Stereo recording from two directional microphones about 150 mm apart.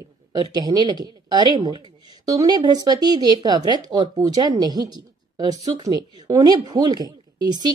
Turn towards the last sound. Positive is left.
turn(degrees=-30)  # may be behind; listen again after turning